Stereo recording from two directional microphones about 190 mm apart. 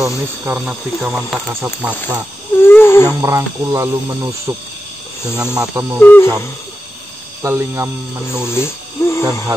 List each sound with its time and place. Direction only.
0.0 s speech: 10° right (ahead or behind)
2.6 s wheeze: 10° left (ahead or behind)
3.1 s speech: 15° right (ahead or behind)
6.0 s wheeze: 10° left (ahead or behind)
7.4 s speech: 15° right (ahead or behind)
8.4 s speech: 15° left (ahead or behind)